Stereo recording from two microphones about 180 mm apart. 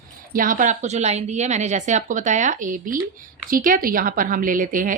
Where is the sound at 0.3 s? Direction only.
50° right (ahead or behind).